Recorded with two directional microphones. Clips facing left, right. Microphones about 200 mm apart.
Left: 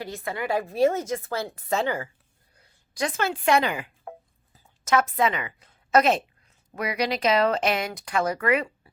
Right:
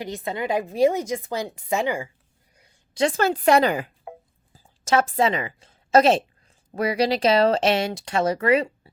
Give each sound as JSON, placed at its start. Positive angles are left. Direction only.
{"t": 0.0, "sound": "a woman's voice", "side_deg": -20}
{"t": 2.9, "sound": "a woman's voice", "side_deg": -25}
{"t": 3.2, "sound": "a woman's voice", "side_deg": -40}